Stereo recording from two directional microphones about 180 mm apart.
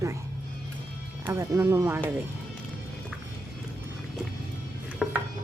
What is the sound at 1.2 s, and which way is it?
Speech, 15° right (ahead or behind).